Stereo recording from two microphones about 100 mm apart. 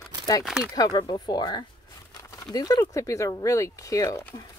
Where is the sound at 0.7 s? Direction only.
45° left (ahead or behind).